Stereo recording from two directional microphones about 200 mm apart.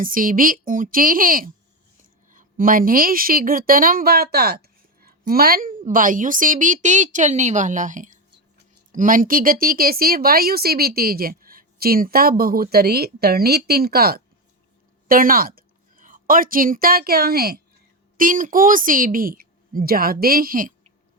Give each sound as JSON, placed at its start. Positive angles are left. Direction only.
{"t": 0.0, "sound": "a woman's voice", "side_deg": -45}